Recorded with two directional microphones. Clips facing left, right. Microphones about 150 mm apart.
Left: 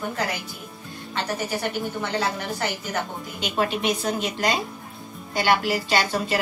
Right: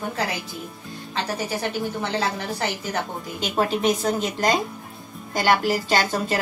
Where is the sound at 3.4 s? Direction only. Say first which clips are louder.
Right 2 dB; 40° right (ahead or behind).